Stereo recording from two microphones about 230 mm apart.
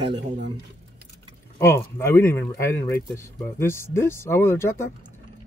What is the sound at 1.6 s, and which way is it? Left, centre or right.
Speech, centre.